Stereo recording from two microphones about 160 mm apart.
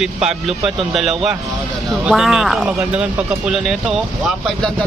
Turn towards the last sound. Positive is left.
turn(degrees=0)  # may be behind; listen again after turning